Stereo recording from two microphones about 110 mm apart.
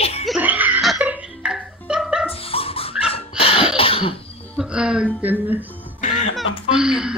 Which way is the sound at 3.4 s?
60° left (ahead or behind).